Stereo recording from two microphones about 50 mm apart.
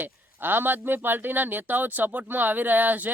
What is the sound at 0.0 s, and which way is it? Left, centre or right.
Speech, right.